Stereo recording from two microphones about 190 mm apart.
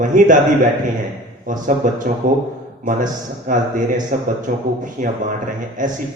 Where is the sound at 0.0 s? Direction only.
45° right (ahead or behind).